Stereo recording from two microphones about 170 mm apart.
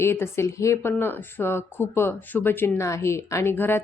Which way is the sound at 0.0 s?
15° left (ahead or behind).